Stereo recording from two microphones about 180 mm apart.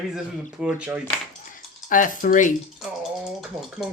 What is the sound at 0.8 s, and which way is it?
Speech, 5° right (ahead or behind).